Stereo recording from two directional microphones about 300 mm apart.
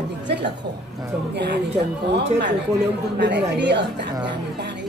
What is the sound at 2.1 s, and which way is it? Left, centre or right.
A woman's voice, right.